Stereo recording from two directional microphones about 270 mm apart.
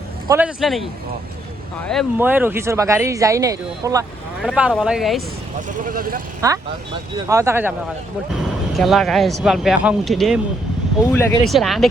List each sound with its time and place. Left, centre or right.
0.3 s speech: centre
5.5 s speech: right
7.3 s speech: centre